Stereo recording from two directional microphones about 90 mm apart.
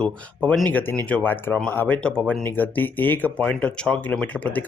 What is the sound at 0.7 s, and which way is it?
Speech, 20° left (ahead or behind).